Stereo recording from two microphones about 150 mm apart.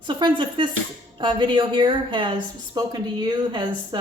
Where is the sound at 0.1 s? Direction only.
35° right (ahead or behind).